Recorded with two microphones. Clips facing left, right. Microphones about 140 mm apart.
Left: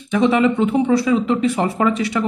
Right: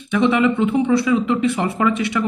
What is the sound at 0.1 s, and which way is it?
A man's voice, 40° left (ahead or behind).